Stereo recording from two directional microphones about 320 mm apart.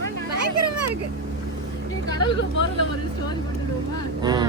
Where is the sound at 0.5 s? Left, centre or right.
Right.